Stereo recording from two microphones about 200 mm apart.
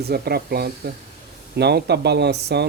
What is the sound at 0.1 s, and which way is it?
Speech, 50° right (ahead or behind).